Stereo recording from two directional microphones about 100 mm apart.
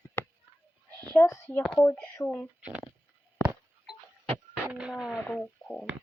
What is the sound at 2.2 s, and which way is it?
Radio, 10° left (ahead or behind).